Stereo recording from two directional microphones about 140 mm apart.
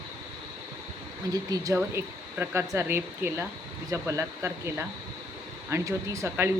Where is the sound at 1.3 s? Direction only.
25° right (ahead or behind).